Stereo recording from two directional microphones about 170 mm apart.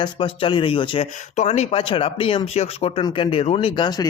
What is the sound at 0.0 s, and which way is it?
Speech, 30° left (ahead or behind).